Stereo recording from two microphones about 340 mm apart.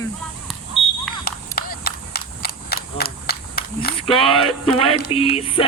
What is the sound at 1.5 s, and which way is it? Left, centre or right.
Cap gun, left.